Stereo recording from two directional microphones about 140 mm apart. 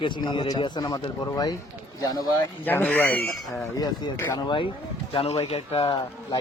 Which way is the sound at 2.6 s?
15° left (ahead or behind).